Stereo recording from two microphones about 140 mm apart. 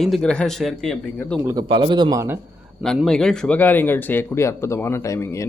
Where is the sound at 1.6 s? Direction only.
35° right (ahead or behind).